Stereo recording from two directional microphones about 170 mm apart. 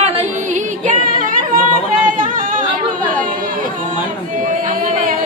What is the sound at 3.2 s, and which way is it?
Chatter, 55° right (ahead or behind).